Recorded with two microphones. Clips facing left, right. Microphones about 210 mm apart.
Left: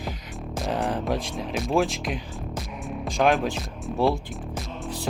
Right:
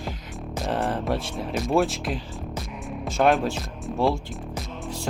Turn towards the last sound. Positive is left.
turn(degrees=0)  # may be behind; listen again after turning